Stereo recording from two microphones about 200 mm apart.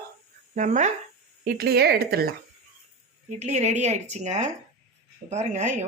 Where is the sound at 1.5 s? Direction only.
50° right (ahead or behind).